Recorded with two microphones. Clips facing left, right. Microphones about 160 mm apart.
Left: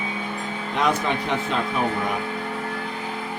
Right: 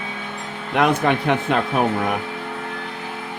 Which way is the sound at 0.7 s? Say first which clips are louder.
Right 5 dB; 60° right (ahead or behind).